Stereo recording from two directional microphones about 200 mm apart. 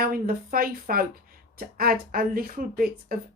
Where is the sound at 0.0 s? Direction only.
45° right (ahead or behind).